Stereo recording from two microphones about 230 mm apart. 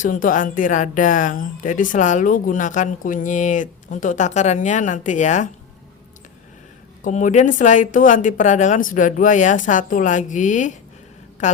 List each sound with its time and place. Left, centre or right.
0.0 s speech: left
7.0 s a woman's voice: left